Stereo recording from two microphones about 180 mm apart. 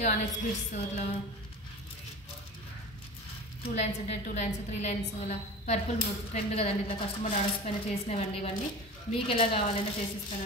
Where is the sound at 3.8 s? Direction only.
40° left (ahead or behind).